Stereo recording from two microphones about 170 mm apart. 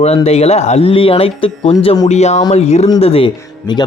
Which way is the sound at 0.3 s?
40° left (ahead or behind).